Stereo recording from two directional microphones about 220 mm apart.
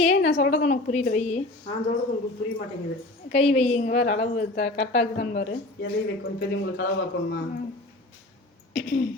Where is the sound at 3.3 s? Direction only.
30° left (ahead or behind).